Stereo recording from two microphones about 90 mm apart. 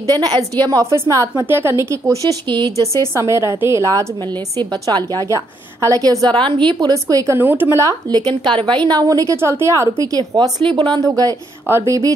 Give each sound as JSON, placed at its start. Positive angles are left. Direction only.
{"t": 0.0, "sound": "a woman's voice", "side_deg": -45}
{"t": 2.4, "sound": "speech", "side_deg": -60}
{"t": 3.0, "sound": "a woman's voice", "side_deg": -30}
{"t": 4.6, "sound": "speech", "side_deg": -50}
{"t": 5.3, "sound": "a woman's voice", "side_deg": -35}
{"t": 6.3, "sound": "speech", "side_deg": -65}
{"t": 6.9, "sound": "a woman's voice", "side_deg": -40}
{"t": 7.3, "sound": "speech", "side_deg": -25}
{"t": 8.1, "sound": "speech", "side_deg": -50}
{"t": 8.5, "sound": "a woman's voice", "side_deg": -65}
{"t": 10.1, "sound": "speech", "side_deg": -50}
{"t": 11.0, "sound": "a woman's voice", "side_deg": -40}
{"t": 11.6, "sound": "a woman's voice", "side_deg": -30}